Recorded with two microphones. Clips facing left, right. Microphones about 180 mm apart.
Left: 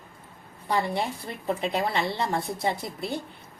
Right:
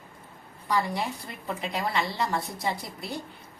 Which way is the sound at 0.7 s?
25° left (ahead or behind).